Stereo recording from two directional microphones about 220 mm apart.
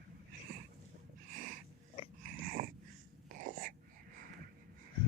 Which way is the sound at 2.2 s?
40° right (ahead or behind).